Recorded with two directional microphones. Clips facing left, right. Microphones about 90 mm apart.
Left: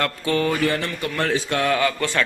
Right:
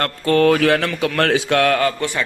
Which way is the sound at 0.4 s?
90° right.